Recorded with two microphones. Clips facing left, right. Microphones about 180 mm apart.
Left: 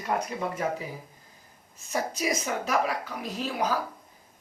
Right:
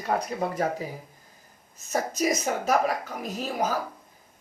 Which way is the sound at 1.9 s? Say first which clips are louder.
Right 3 dB; 45° right (ahead or behind).